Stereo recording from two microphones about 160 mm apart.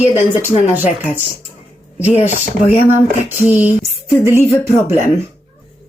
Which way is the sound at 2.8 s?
10° right (ahead or behind).